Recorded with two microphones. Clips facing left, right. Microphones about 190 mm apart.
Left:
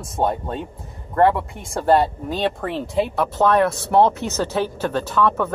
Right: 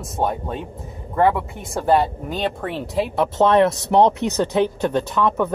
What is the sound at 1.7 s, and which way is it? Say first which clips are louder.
Speech: left 1 dB; centre (ahead or behind).